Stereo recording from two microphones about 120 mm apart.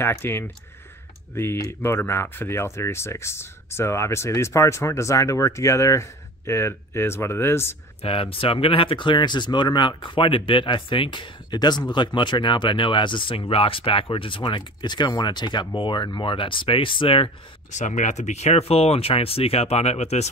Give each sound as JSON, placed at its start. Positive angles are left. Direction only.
{"t": 0.0, "sound": "speech", "side_deg": 20}
{"t": 8.0, "sound": "speech", "side_deg": 50}
{"t": 17.6, "sound": "speech", "side_deg": 85}